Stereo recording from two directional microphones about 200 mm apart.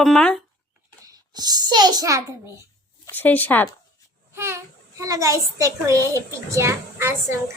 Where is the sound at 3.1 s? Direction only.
10° left (ahead or behind).